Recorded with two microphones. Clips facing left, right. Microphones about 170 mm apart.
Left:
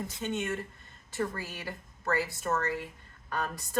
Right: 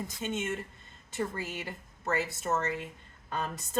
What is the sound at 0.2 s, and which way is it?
A woman's voice, 20° right (ahead or behind).